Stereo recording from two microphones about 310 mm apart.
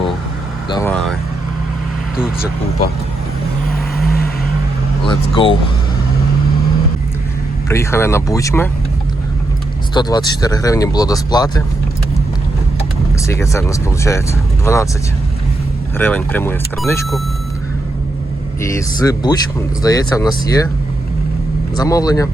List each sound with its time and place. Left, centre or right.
0.7 s vehicle: centre
2.1 s speech: centre
3.9 s vehicle: left
5.0 s speech: centre
7.7 s speech: centre
9.9 s speech: centre
13.2 s speech: centre
16.0 s speech: centre
18.6 s speech: centre
21.8 s speech: centre